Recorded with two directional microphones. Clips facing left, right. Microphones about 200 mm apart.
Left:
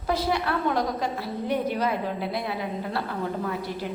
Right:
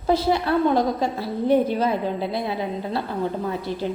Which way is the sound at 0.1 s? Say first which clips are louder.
Right 6 dB; 25° right (ahead or behind).